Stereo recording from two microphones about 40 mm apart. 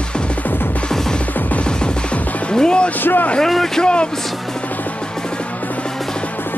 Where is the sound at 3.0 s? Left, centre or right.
Left.